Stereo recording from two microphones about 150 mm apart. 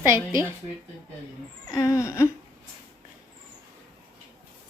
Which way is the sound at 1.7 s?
20° left (ahead or behind).